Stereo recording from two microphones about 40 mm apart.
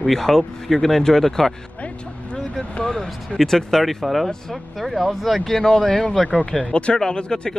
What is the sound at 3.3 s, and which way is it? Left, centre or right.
Speech, centre.